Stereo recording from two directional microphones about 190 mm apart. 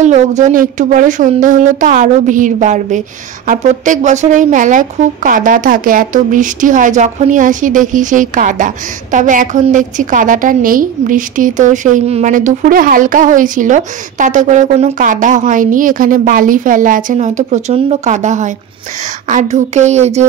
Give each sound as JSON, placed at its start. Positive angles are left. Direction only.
{"t": 0.0, "sound": "speech", "side_deg": -40}